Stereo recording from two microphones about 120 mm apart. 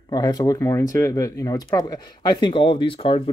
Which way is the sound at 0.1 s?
35° left (ahead or behind).